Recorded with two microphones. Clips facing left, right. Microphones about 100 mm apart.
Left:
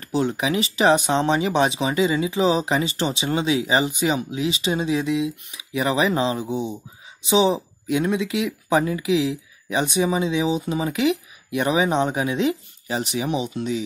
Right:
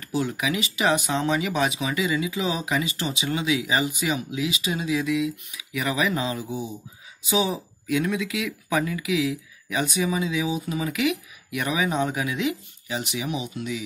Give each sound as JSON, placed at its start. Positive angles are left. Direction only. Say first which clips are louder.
{"t": 0.0, "sound": "speech", "louder": "left 4 dB", "side_deg": 30}